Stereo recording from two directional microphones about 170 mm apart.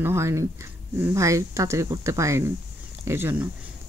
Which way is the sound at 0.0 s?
15° right (ahead or behind).